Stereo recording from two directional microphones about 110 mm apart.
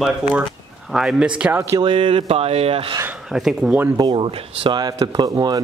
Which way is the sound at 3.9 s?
45° right (ahead or behind).